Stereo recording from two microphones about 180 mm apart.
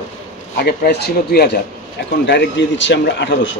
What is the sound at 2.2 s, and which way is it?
Speech, 85° left.